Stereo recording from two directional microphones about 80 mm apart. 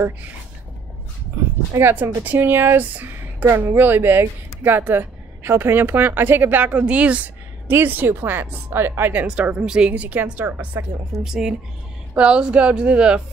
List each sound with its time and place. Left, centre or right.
1.8 s speech: right
11.2 s speech: centre